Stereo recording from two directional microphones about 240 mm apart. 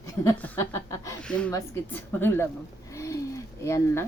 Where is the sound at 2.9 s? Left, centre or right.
Centre.